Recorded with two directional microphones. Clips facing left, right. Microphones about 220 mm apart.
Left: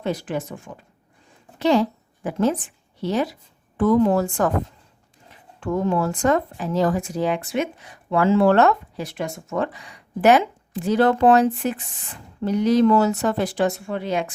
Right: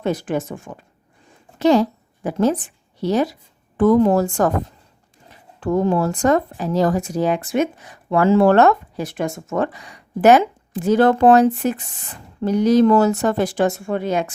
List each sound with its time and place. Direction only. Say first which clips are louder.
0.0 s a woman's voice: right 4 dB; 50° right (ahead or behind)
5.5 s speech: right 4 dB; 35° right (ahead or behind)